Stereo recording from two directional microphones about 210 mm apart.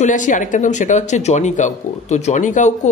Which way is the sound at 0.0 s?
35° left (ahead or behind).